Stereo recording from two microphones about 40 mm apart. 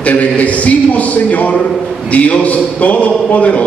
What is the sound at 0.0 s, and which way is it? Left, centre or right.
A man's voice, left.